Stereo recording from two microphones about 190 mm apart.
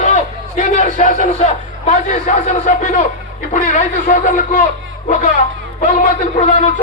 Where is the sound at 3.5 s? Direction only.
40° left (ahead or behind).